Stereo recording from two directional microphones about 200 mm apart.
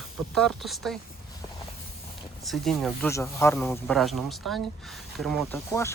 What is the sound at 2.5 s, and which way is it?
Speech, centre (ahead or behind).